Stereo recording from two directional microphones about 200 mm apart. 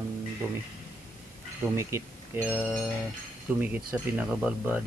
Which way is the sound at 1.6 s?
15° right (ahead or behind).